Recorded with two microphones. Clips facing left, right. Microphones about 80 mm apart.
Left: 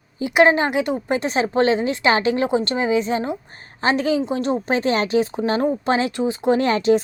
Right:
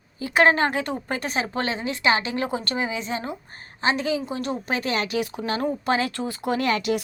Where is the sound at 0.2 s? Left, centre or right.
Centre.